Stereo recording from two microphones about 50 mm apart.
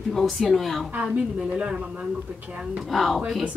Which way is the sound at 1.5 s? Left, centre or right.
Centre.